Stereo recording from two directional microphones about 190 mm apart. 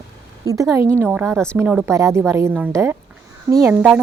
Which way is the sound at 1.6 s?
10° right (ahead or behind).